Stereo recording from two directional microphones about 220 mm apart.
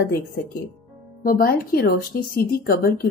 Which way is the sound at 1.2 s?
40° left (ahead or behind).